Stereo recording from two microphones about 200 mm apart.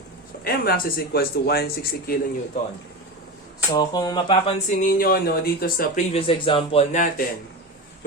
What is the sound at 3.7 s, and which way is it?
Speech, 20° left (ahead or behind).